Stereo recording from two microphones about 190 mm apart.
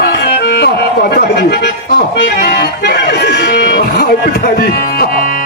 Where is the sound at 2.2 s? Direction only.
60° left (ahead or behind).